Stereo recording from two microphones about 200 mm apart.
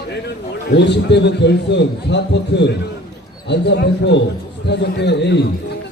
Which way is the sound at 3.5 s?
60° left (ahead or behind).